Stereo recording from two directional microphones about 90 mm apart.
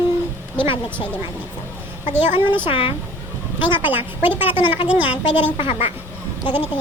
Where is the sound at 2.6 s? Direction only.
80° left.